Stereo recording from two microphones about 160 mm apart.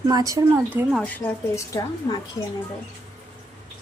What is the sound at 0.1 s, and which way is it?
Speech, 20° right (ahead or behind).